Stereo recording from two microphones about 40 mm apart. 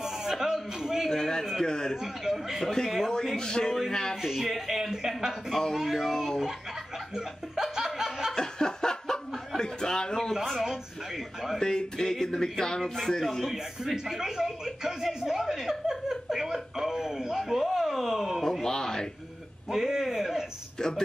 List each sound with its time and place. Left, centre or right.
0.0 s a sound: centre
1.1 s a sound: centre
1.5 s speech: centre
2.2 s speech: centre
2.6 s speech: centre
4.3 s speech: centre
5.5 s speech: centre
7.2 s music: centre
8.4 s a sound: centre
9.6 s chuckle: centre
11.6 s speech: centre
13.5 s speech: centre
18.4 s speech: centre
19.7 s speech: centre